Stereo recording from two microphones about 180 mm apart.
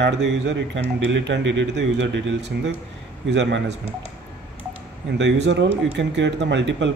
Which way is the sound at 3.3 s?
75° right (ahead or behind).